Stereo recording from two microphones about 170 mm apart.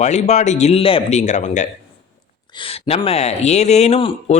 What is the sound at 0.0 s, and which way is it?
Speech, 40° left (ahead or behind).